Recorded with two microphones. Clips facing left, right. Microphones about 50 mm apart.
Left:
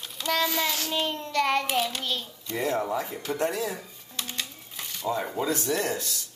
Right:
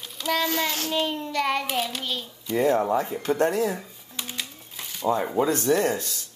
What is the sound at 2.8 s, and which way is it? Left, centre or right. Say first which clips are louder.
Speech: right 5 dB; right.